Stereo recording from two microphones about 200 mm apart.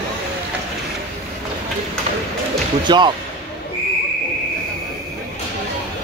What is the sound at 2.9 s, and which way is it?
Speech, 25° right (ahead or behind).